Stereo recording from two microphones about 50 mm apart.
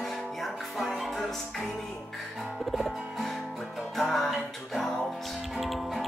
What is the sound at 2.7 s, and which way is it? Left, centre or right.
Music, centre.